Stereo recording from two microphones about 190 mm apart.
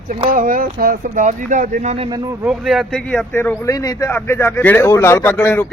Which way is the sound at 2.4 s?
5° right (ahead or behind).